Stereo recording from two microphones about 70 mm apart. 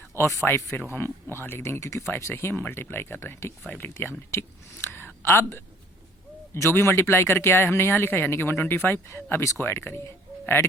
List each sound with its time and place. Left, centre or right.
0.4 s speech: left
0.9 s speech: left
4.3 s a sound: left
5.2 s speech: left